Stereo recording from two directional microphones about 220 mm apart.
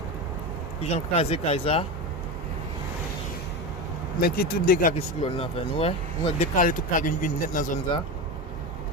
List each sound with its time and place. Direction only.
0.8 s speech: 30° left (ahead or behind)
4.2 s speech: 45° left (ahead or behind)
5.2 s speech: 25° left (ahead or behind)
6.4 s speech: 35° left (ahead or behind)